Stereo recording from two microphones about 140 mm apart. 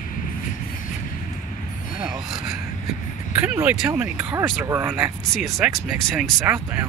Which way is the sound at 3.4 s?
10° right (ahead or behind).